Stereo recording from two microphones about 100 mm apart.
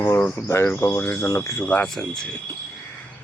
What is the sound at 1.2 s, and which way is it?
Speech, 35° left (ahead or behind).